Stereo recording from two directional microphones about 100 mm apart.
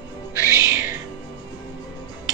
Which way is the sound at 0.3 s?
35° left (ahead or behind).